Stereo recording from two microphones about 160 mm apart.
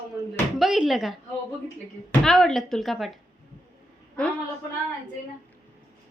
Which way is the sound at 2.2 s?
5° left (ahead or behind).